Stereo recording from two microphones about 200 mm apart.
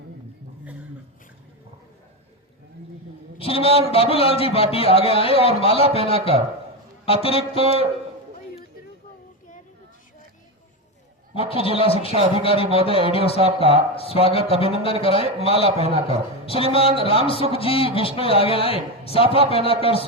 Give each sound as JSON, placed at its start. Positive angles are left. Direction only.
{"t": 3.3, "sound": "a man's voice", "side_deg": 30}
{"t": 7.0, "sound": "music", "side_deg": 30}
{"t": 11.4, "sound": "a man's voice", "side_deg": 30}
{"t": 13.4, "sound": "speech", "side_deg": -30}
{"t": 13.9, "sound": "a man's voice", "side_deg": 30}
{"t": 15.4, "sound": "a man's voice", "side_deg": -30}
{"t": 16.0, "sound": "a man's voice", "side_deg": 30}